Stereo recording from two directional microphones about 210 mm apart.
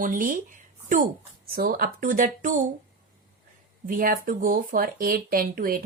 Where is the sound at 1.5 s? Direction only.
45° right (ahead or behind).